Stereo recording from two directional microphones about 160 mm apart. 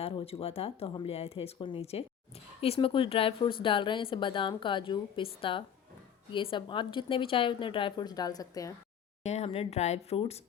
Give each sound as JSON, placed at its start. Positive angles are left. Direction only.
{"t": 0.0, "sound": "speech", "side_deg": 35}
{"t": 9.2, "sound": "speech", "side_deg": 40}